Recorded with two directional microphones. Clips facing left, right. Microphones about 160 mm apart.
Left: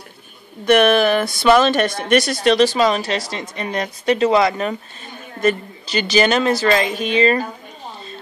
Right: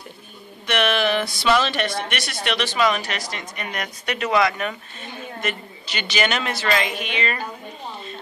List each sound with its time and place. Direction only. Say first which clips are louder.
0.7 s speech: left 8 dB; 45° left (ahead or behind)